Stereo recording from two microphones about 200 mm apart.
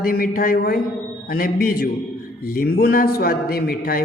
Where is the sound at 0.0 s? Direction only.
45° left (ahead or behind).